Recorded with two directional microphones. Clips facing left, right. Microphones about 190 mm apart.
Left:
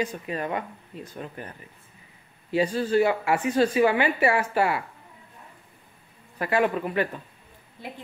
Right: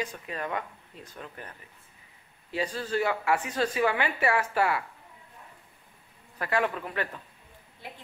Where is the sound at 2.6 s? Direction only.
10° left (ahead or behind).